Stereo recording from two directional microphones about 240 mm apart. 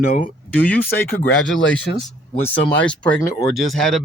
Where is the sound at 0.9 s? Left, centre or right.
Left.